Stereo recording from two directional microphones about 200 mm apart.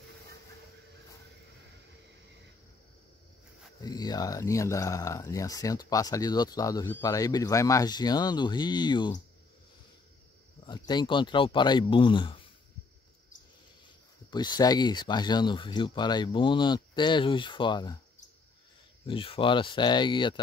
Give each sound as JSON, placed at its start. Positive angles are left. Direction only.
{"t": 3.8, "sound": "speech", "side_deg": 20}
{"t": 10.7, "sound": "speech", "side_deg": 20}
{"t": 14.3, "sound": "speech", "side_deg": 20}
{"t": 19.0, "sound": "speech", "side_deg": 25}